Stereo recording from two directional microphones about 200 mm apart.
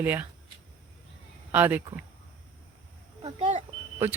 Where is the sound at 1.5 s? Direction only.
10° right (ahead or behind).